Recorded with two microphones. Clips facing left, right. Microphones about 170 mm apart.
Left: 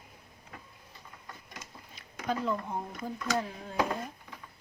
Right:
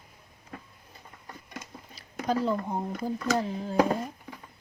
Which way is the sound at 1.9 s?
35° right (ahead or behind).